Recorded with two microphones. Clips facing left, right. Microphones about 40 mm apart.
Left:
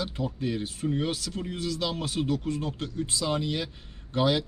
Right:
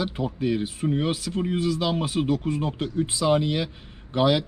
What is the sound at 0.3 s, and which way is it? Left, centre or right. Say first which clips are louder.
Speech: right 5 dB; centre.